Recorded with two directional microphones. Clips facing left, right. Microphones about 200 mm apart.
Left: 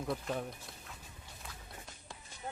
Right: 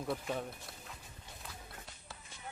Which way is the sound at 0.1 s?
5° right (ahead or behind).